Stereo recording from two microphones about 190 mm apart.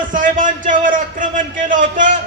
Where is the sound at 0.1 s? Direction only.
45° right (ahead or behind).